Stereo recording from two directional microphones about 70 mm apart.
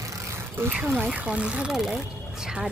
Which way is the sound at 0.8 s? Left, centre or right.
Right.